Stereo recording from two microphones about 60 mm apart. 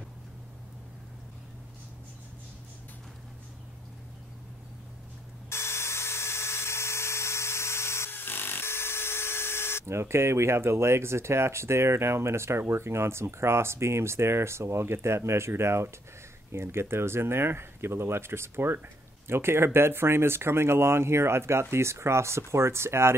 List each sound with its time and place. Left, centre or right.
5.5 s dental drill: left
9.8 s speech: right